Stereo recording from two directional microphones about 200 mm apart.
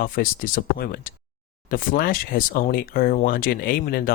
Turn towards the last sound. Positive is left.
turn(degrees=45)  # may be behind; listen again after turning